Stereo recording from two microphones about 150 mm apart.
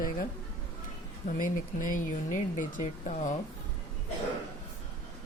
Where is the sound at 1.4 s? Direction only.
60° left (ahead or behind).